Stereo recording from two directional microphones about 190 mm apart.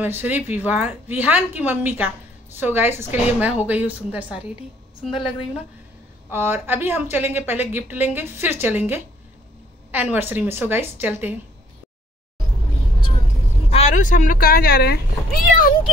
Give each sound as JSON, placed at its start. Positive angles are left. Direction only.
{"t": 0.0, "sound": "a woman's voice", "side_deg": -10}
{"t": 6.3, "sound": "a woman's voice", "side_deg": -10}
{"t": 13.7, "sound": "speech", "side_deg": 35}